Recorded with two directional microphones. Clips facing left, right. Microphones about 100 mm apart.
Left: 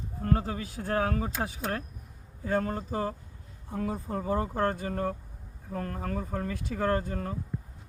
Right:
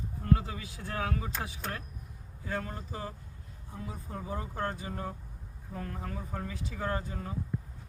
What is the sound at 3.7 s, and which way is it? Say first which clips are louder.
Speech: left 10 dB; 60° left (ahead or behind).